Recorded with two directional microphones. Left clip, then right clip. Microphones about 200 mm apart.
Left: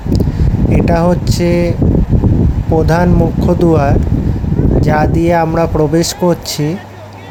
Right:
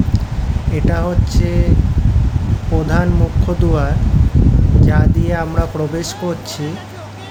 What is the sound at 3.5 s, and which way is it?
Speech, 35° left (ahead or behind).